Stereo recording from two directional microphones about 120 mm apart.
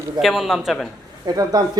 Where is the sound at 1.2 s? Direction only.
30° right (ahead or behind).